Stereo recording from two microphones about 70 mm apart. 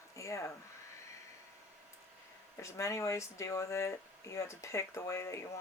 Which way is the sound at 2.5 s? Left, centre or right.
Left.